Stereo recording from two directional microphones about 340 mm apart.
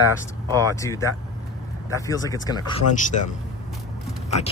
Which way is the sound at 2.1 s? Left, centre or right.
Centre.